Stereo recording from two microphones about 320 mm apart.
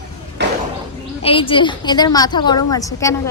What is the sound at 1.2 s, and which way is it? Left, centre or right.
A woman's voice, centre.